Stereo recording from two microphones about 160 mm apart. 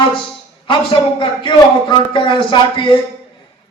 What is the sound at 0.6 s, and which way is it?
A man's voice, 30° left (ahead or behind).